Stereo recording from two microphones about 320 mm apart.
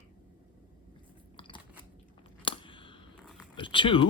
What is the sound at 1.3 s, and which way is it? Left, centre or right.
Biting, centre.